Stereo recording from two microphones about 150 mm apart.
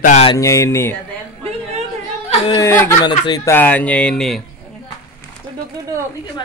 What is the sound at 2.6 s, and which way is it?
Speech, 15° left (ahead or behind).